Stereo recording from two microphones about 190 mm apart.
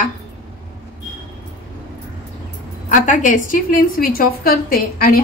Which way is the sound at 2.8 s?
40° left (ahead or behind).